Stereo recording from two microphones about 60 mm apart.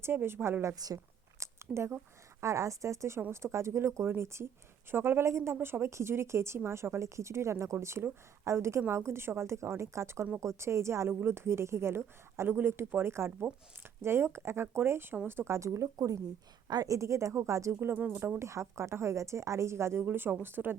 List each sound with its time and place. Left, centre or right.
0.0 s speech: right
0.8 s speech: right
1.4 s a sound: right
2.4 s a woman's voice: right
16.7 s speech: right
17.7 s speech: right
17.9 s speech: right
18.3 s a woman's voice: right
20.1 s speech: right